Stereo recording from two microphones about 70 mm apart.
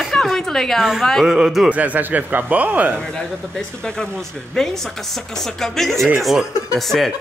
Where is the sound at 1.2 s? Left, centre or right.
Centre.